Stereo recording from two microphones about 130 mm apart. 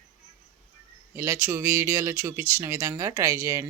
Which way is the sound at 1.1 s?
20° right (ahead or behind).